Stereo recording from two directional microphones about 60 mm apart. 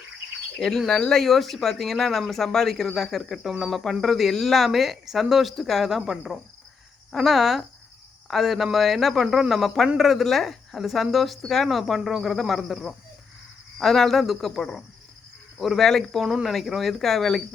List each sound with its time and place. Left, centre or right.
0.9 s speech: centre